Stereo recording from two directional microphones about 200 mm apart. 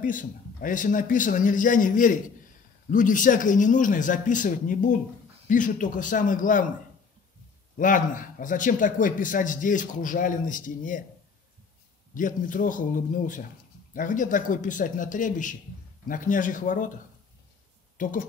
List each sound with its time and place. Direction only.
0.0 s a man's voice: 40° left (ahead or behind)
7.7 s a man's voice: 40° left (ahead or behind)
12.1 s a man's voice: 40° left (ahead or behind)
17.9 s speech: 40° left (ahead or behind)